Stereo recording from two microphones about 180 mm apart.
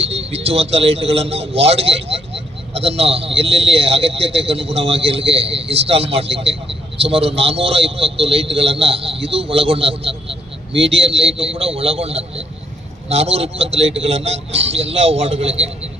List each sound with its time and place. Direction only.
0.0 s a man's voice: 35° right (ahead or behind)